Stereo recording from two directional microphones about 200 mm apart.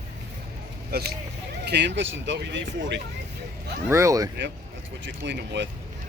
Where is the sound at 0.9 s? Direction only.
50° right (ahead or behind).